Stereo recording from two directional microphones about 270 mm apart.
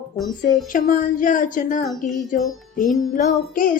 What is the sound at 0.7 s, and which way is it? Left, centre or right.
A woman's voice, left.